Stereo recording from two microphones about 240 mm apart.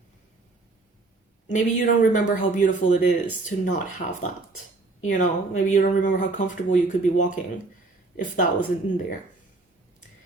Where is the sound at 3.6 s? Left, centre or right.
Left.